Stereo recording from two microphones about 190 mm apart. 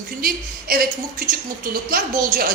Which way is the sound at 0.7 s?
50° right (ahead or behind).